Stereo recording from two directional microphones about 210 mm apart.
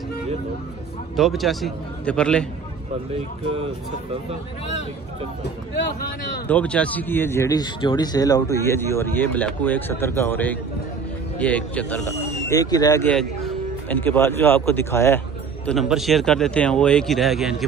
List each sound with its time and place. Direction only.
1.1 s speech: centre (ahead or behind)
6.4 s speech: 5° left (ahead or behind)
12.4 s speech: 15° left (ahead or behind); by 17.6 s centre (ahead or behind)